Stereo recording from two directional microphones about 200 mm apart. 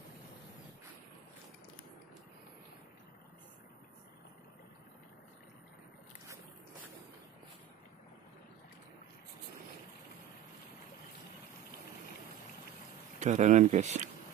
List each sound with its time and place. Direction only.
13.2 s speech: 35° right (ahead or behind)